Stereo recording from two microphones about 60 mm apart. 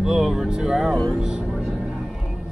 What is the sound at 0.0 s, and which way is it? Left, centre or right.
Speech, centre.